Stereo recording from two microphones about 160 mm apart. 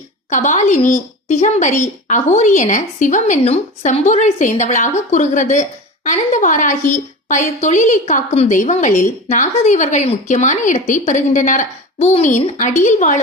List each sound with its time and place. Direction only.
0.3 s a woman's voice: 50° left (ahead or behind)